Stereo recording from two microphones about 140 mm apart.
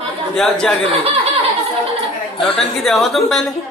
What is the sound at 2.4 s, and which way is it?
A woman's voice, centre (ahead or behind).